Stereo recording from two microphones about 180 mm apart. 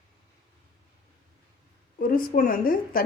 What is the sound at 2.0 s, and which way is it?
A woman's voice, 50° left (ahead or behind).